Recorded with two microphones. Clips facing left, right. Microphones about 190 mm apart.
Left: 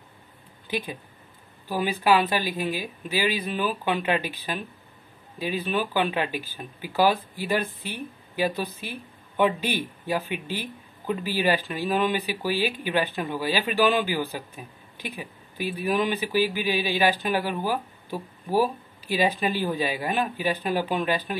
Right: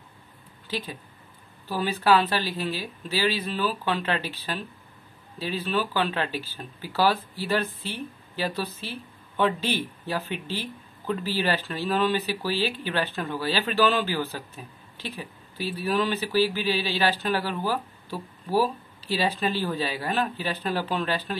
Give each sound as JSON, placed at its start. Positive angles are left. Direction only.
{"t": 0.7, "sound": "speech", "side_deg": 15}